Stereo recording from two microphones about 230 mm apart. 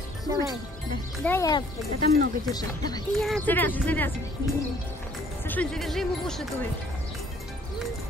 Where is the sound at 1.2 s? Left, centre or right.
Centre.